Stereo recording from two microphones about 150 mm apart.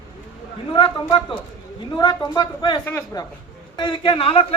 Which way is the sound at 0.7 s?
30° left (ahead or behind).